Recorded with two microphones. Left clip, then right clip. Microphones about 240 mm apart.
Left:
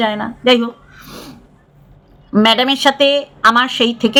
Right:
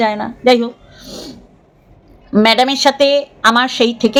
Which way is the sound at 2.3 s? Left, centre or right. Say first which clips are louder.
Right 1 dB; centre.